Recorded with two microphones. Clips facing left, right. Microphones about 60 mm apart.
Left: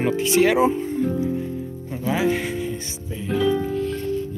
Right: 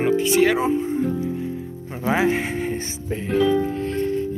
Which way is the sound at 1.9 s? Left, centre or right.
Right.